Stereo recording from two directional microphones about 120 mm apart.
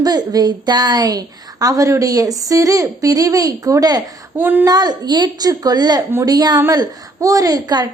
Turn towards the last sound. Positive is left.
turn(degrees=-30)  # may be behind; listen again after turning